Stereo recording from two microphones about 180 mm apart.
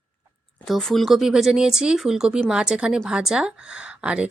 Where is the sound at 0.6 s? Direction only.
Centre (ahead or behind).